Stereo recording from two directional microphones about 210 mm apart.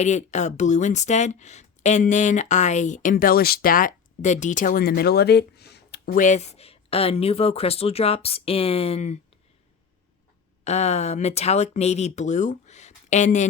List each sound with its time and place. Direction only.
0.0 s speech: 35° left (ahead or behind)
10.6 s speech: 30° left (ahead or behind)